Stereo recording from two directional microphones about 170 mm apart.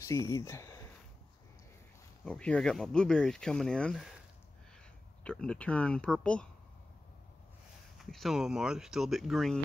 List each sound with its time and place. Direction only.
0.1 s speech: 15° left (ahead or behind)
2.2 s speech: 5° left (ahead or behind)
5.2 s speech: 5° left (ahead or behind)
8.0 s speech: centre (ahead or behind)